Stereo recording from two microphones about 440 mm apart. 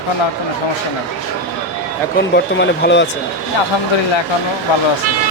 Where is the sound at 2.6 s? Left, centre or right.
Left.